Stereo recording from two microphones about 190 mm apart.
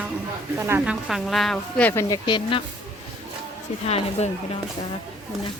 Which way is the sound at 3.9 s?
35° left (ahead or behind).